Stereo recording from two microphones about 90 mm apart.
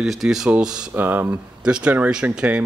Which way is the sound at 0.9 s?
20° right (ahead or behind).